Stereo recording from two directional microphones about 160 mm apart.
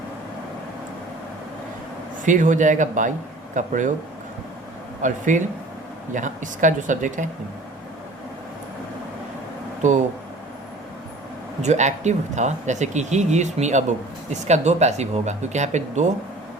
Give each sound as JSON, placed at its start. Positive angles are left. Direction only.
{"t": 2.2, "sound": "speech", "side_deg": -55}
{"t": 5.0, "sound": "speech", "side_deg": -50}
{"t": 11.6, "sound": "speech", "side_deg": -45}